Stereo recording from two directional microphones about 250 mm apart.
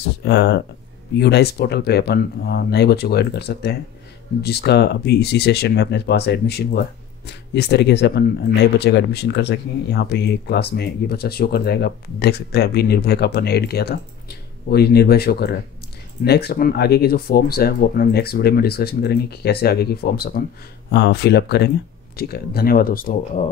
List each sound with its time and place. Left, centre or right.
0.2 s speech: left